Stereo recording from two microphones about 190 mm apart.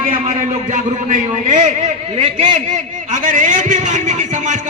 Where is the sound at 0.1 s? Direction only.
40° right (ahead or behind).